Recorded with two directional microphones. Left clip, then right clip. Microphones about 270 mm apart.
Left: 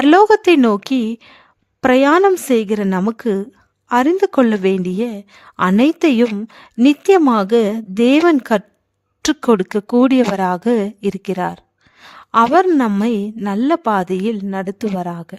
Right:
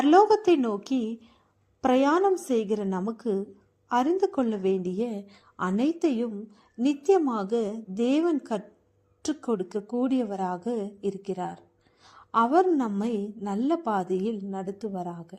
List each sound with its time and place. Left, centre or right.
0.0 s a woman's voice: left
12.0 s a sound: left
12.8 s a woman's voice: left